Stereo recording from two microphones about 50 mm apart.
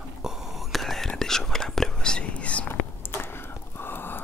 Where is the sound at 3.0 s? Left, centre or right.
Left.